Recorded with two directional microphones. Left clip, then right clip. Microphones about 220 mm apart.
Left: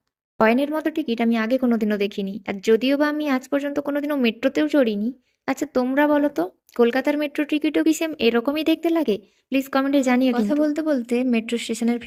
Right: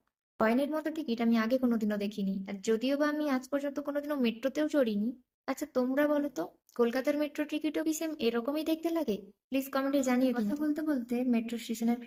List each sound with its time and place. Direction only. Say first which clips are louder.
0.3 s speech: left 10 dB; 40° left (ahead or behind)